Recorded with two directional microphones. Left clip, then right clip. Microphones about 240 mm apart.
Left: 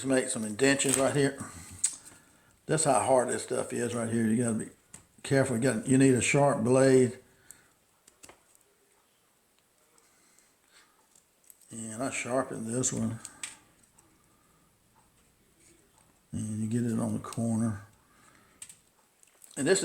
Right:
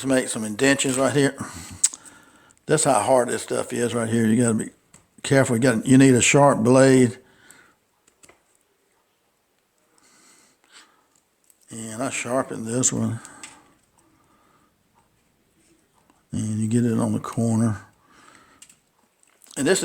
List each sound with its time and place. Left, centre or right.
0.0 s speech: right
11.7 s speech: right
16.3 s speech: right
19.5 s speech: right